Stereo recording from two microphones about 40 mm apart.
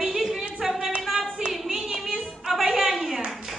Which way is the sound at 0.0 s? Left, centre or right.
Centre.